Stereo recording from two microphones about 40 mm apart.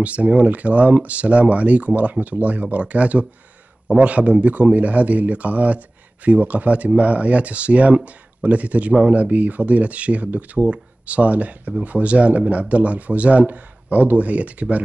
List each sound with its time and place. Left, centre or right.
0.0 s speech: right
2.1 s speech: right